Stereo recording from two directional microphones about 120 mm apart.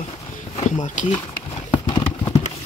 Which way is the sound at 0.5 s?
90° left.